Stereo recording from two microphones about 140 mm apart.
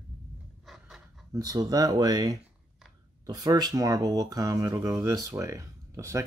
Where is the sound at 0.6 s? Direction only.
Centre (ahead or behind).